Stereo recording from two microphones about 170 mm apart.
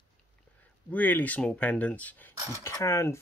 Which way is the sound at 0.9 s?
10° left (ahead or behind).